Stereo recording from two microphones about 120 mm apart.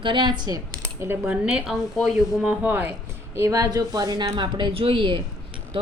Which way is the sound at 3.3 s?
25° right (ahead or behind).